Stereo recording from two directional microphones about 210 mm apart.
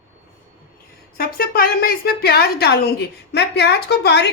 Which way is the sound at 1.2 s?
45° left (ahead or behind).